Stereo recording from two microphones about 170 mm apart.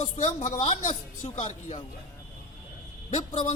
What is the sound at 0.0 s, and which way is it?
Speech, 35° left (ahead or behind).